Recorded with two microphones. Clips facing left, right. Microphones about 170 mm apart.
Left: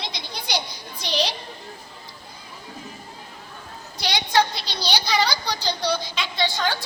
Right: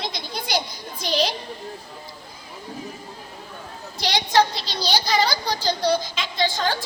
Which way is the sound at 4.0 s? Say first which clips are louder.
Right 2 dB; 40° right (ahead or behind).